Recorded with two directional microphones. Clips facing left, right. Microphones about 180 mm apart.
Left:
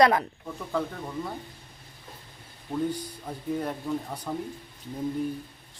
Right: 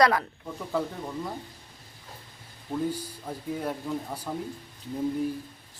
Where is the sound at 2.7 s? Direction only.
5° right (ahead or behind).